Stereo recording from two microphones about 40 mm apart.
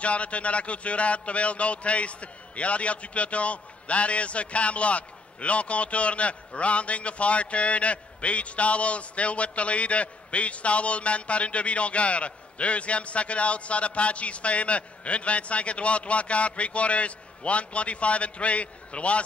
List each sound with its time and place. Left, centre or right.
0.0 s a man's voice: left